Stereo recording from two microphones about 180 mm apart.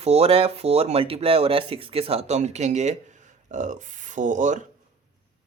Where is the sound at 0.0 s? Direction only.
35° right (ahead or behind).